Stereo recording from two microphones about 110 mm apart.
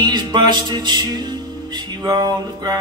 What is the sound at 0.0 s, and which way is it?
Music, 45° right (ahead or behind).